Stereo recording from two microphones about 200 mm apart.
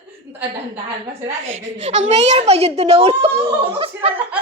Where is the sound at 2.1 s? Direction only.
30° right (ahead or behind).